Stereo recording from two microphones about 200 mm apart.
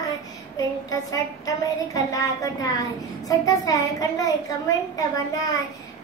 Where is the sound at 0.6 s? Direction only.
20° left (ahead or behind).